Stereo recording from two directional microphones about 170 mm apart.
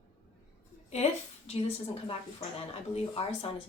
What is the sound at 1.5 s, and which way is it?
A woman's voice, 35° left (ahead or behind).